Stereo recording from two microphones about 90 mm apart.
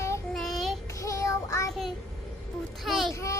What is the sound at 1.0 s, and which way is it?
Child singing, 35° left (ahead or behind).